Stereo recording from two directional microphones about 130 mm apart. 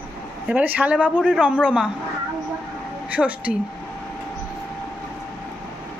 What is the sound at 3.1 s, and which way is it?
Speech, 10° right (ahead or behind).